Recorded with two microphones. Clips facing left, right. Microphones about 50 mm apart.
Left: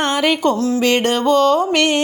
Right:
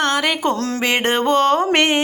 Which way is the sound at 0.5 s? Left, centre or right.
Right.